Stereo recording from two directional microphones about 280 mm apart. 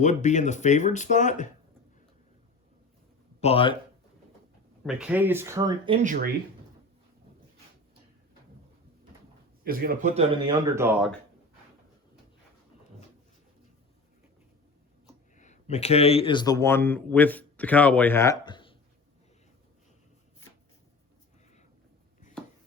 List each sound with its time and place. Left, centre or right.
0.0 s speech: left
3.4 s speech: centre
4.8 s speech: centre; by 6.3 s right
9.6 s speech: right
10.8 s speech: centre
15.4 s speech: left